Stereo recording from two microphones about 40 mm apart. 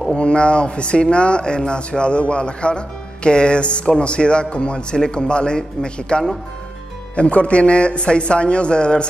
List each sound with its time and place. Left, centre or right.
0.1 s a man's voice: left